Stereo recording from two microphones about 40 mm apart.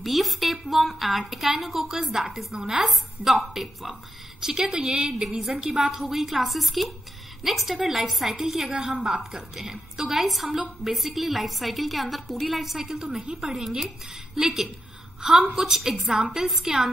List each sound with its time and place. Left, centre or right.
0.0 s a woman's voice: centre
2.9 s a woman's voice: centre
8.7 s a woman's voice: centre
9.2 s a woman's voice: centre
13.0 s a woman's voice: centre